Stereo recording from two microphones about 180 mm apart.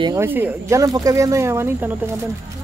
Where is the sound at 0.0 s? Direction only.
15° right (ahead or behind).